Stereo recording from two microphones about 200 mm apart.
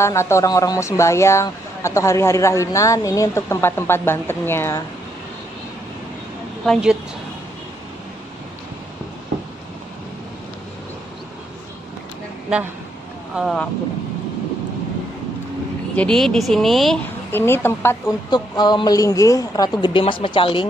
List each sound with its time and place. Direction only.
0.0 s a woman's voice: 15° left (ahead or behind)
6.6 s speech: centre (ahead or behind)
13.4 s speech: centre (ahead or behind)
16.0 s a woman's voice: 5° left (ahead or behind); by 20.6 s 25° left (ahead or behind)